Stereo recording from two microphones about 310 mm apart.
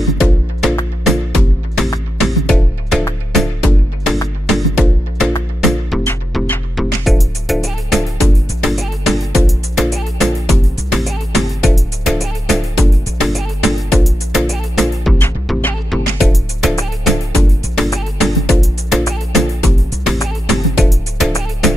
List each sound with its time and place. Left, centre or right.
0.0 s music: centre
2.1 s music: centre
4.5 s music: centre
20.4 s music: centre